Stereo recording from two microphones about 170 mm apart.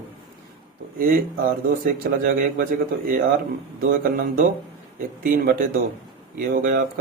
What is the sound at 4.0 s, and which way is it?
A man's voice, 60° right (ahead or behind).